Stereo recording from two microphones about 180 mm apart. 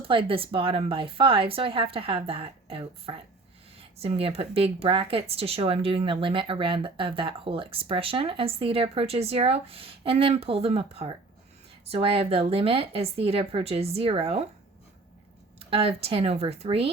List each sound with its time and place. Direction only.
0.0 s speech: 30° right (ahead or behind)
15.5 s speech: 35° right (ahead or behind)